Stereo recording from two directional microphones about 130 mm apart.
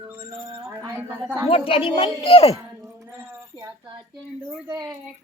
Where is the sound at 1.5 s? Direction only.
45° left (ahead or behind).